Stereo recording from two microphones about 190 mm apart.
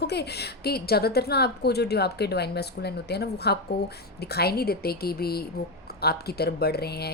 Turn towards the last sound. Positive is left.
turn(degrees=55)  # may be behind; listen again after turning